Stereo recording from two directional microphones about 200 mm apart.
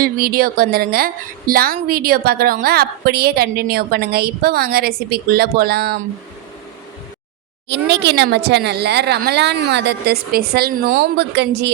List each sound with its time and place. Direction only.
0.0 s a woman's voice: 45° right (ahead or behind)
7.7 s speech: 60° right (ahead or behind)